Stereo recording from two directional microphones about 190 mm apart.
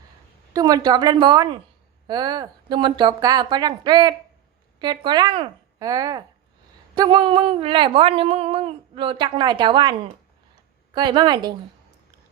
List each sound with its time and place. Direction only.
0.5 s speech: 20° right (ahead or behind)
10.9 s speech: 25° right (ahead or behind)